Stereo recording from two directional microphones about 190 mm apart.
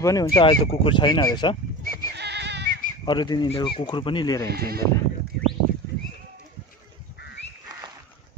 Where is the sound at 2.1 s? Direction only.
60° right (ahead or behind).